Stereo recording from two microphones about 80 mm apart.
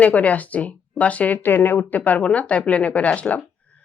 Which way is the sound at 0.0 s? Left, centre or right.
Centre.